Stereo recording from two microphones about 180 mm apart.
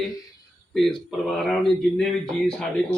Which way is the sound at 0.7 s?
Centre (ahead or behind).